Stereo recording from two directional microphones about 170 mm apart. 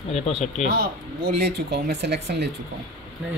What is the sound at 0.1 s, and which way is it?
Speech, 40° left (ahead or behind).